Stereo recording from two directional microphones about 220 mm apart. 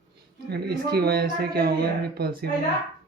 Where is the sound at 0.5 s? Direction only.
45° right (ahead or behind).